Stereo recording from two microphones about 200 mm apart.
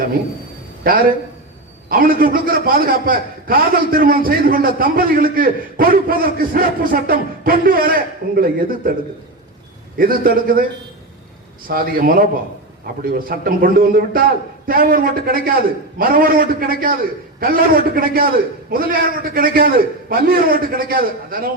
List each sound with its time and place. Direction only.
0.9 s a man's voice: 45° right (ahead or behind)
10.0 s a man's voice: 45° right (ahead or behind)
11.7 s a man's voice: 45° right (ahead or behind)